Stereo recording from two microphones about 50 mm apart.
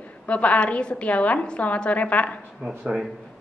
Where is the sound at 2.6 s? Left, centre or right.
Centre.